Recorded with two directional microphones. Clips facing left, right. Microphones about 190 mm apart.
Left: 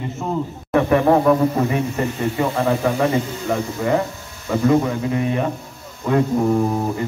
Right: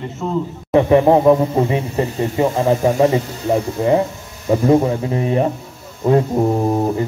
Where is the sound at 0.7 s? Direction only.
20° right (ahead or behind).